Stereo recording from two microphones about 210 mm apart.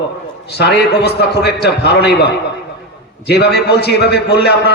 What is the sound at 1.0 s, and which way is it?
A man's voice, 50° left (ahead or behind).